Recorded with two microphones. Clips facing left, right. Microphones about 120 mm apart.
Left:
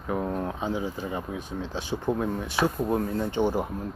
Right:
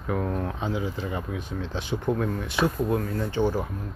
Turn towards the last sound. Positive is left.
turn(degrees=20)  # may be behind; listen again after turning